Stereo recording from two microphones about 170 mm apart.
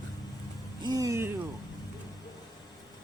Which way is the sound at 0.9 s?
20° right (ahead or behind).